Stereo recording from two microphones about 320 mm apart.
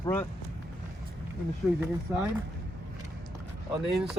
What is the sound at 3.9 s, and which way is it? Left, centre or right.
Speech, centre.